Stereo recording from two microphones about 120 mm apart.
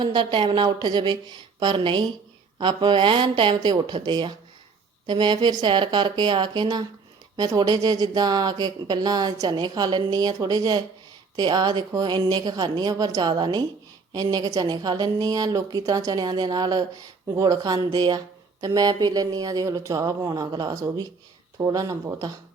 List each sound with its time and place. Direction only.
0.0 s a woman's voice: 40° right (ahead or behind)